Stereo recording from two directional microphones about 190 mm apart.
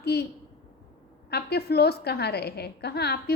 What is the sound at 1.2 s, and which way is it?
A woman's voice, 60° left (ahead or behind).